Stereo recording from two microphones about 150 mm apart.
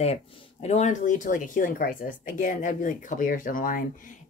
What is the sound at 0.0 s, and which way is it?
Speech, 45° left (ahead or behind).